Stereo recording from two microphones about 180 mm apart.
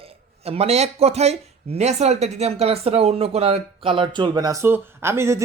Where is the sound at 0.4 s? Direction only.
35° right (ahead or behind).